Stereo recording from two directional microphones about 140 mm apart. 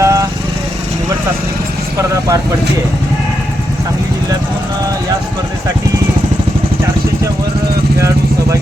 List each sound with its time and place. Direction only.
0.0 s vehicle: 25° right (ahead or behind)
2.0 s speech: 25° right (ahead or behind)
7.9 s vehicle: 20° right (ahead or behind)